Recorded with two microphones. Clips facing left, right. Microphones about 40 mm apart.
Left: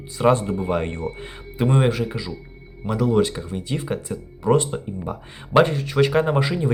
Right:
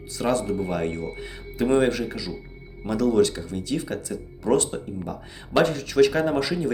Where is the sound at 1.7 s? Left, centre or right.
Centre.